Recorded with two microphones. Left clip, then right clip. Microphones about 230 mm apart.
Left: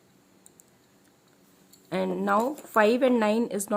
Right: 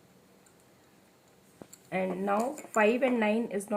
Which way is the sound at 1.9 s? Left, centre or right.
Left.